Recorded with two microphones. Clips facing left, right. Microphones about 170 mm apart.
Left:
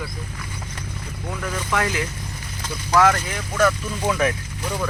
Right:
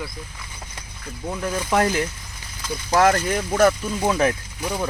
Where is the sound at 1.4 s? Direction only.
35° right (ahead or behind).